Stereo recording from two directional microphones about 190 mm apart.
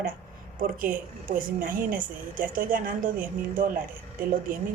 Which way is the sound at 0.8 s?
45° right (ahead or behind).